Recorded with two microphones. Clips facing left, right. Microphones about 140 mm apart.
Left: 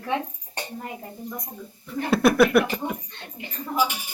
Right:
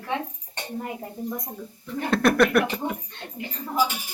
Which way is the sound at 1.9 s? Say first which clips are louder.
Left 1 dB; 5° left (ahead or behind).